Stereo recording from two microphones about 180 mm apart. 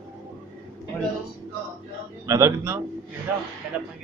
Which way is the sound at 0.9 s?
5° left (ahead or behind).